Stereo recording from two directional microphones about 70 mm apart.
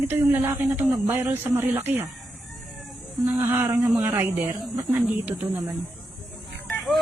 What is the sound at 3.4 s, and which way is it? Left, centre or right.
Speech, right.